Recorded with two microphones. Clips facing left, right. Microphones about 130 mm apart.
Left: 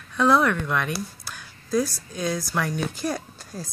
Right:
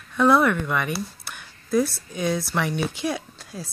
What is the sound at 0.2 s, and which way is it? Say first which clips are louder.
Speech: right 2 dB; 5° right (ahead or behind).